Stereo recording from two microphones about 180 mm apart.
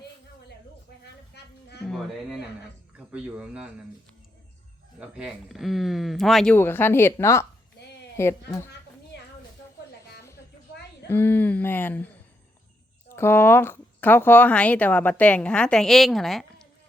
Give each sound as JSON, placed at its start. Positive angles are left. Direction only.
{"t": 1.4, "sound": "a sound", "side_deg": 65}
{"t": 3.1, "sound": "speech", "side_deg": -5}
{"t": 4.9, "sound": "speech", "side_deg": -5}
{"t": 9.1, "sound": "a sound", "side_deg": 70}
{"t": 11.1, "sound": "speech", "side_deg": 10}
{"t": 13.1, "sound": "speech", "side_deg": 15}